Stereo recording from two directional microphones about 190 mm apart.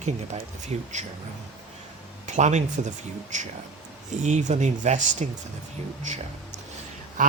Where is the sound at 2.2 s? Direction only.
40° right (ahead or behind).